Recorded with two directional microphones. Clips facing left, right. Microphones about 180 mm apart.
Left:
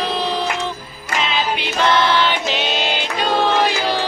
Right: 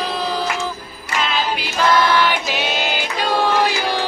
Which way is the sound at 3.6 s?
10° right (ahead or behind).